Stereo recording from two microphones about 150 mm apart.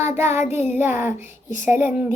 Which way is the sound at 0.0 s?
15° right (ahead or behind).